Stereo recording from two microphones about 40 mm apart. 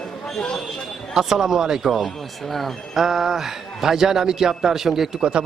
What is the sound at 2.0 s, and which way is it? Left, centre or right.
Speech, centre.